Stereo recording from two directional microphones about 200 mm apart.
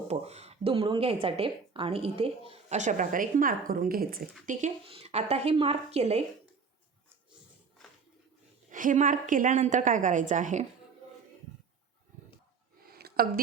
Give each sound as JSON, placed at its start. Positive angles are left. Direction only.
{"t": 0.1, "sound": "speech", "side_deg": -30}
{"t": 4.4, "sound": "speech", "side_deg": -35}
{"t": 8.7, "sound": "speech", "side_deg": -40}
{"t": 12.9, "sound": "a sound", "side_deg": -50}